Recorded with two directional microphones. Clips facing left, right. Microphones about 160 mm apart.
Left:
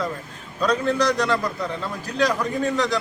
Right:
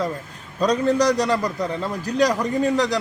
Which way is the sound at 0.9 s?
15° right (ahead or behind).